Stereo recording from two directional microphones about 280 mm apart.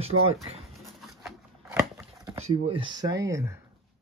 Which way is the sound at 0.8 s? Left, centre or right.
Centre.